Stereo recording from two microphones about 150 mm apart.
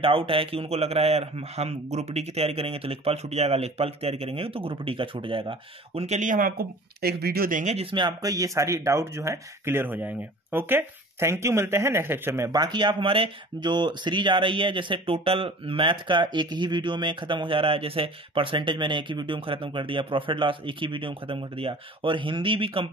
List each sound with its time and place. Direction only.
0.0 s speech: 35° right (ahead or behind); by 7.7 s 65° right (ahead or behind)
7.7 s speech: 35° right (ahead or behind)